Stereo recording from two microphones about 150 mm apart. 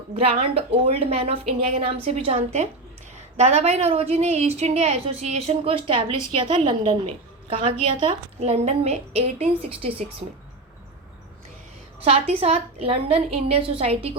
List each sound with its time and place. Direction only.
0.1 s a woman's voice: 40° right (ahead or behind)
12.0 s a woman's voice: 40° right (ahead or behind)